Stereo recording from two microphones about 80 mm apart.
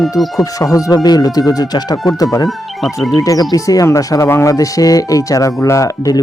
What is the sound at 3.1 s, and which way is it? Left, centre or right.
Speech, left.